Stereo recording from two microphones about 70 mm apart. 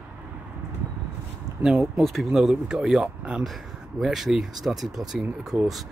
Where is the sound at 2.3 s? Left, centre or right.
Centre.